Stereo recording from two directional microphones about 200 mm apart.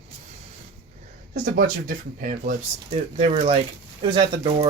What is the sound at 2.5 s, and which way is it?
Speech, 30° right (ahead or behind).